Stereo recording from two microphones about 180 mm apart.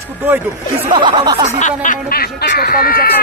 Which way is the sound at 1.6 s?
45° left (ahead or behind).